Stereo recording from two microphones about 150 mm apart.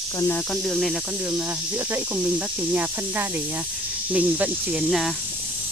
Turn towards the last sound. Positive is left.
turn(degrees=0)  # may be behind; listen again after turning